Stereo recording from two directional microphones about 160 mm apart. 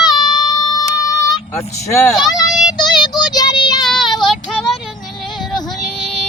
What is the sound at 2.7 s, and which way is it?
Child singing, 25° left (ahead or behind).